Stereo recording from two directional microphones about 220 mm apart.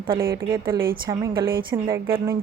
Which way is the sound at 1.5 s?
40° right (ahead or behind).